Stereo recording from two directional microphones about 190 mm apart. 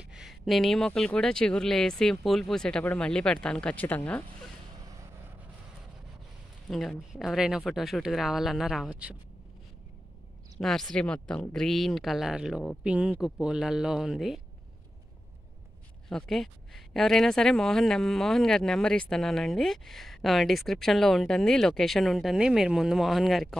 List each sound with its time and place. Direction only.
0.1 s speech: centre (ahead or behind)
6.7 s speech: centre (ahead or behind)
10.6 s speech: centre (ahead or behind)
16.1 s speech: centre (ahead or behind)